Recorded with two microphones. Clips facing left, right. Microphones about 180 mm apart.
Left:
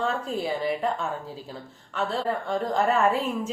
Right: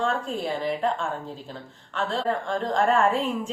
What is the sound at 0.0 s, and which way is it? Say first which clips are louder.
Speech: right 1 dB; 5° left (ahead or behind).